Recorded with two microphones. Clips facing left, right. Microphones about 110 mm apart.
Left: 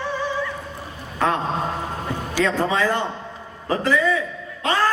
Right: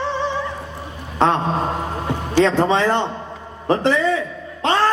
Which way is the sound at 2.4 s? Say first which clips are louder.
Right 5 dB; 25° right (ahead or behind).